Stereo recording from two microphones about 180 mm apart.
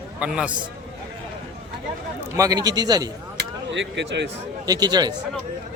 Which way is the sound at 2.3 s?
20° right (ahead or behind).